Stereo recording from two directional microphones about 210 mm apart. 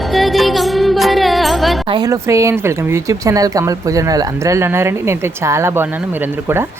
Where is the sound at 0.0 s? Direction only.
Centre (ahead or behind).